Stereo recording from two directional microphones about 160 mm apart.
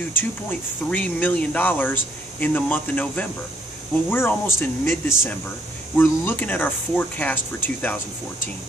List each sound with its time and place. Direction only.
0.1 s speech: 10° left (ahead or behind)